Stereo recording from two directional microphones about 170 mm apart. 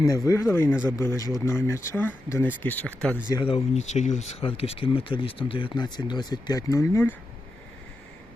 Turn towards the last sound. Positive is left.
turn(degrees=15)  # may be behind; listen again after turning